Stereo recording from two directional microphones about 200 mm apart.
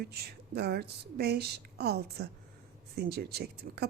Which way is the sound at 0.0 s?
50° right (ahead or behind).